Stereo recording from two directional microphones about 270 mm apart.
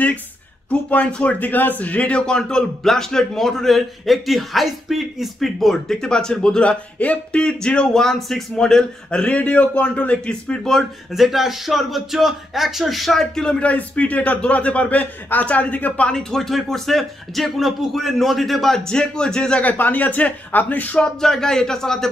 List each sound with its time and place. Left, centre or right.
0.7 s a man's voice: centre